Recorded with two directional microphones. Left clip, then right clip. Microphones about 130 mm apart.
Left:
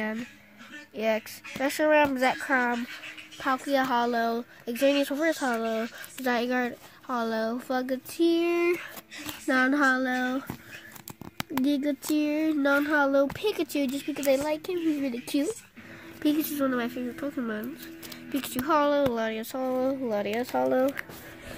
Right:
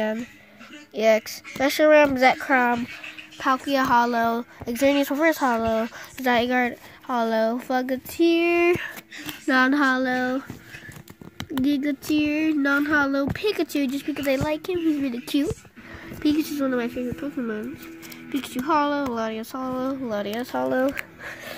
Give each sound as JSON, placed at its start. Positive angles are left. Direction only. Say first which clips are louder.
{"t": 0.9, "sound": "speech", "louder": "right 8 dB", "side_deg": -20}
{"t": 8.4, "sound": "speech", "louder": "right 6 dB", "side_deg": -5}
{"t": 11.6, "sound": "speech", "louder": "right 4 dB", "side_deg": -5}
{"t": 16.2, "sound": "a woman's voice", "louder": "right 3 dB", "side_deg": 10}